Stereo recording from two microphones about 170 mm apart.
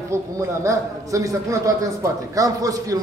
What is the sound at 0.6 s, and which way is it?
A man's voice, 20° right (ahead or behind).